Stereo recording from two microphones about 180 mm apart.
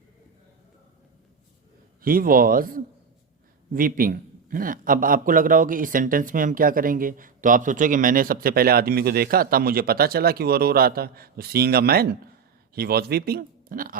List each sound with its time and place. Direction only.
2.0 s a man's voice: 55° right (ahead or behind)